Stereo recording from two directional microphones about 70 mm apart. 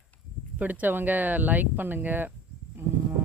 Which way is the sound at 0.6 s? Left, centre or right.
Right.